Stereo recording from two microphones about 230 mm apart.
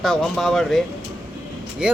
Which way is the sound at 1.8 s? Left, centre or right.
Centre.